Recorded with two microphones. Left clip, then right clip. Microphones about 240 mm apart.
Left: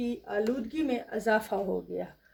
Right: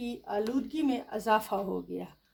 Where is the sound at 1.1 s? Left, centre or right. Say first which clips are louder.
Even; right.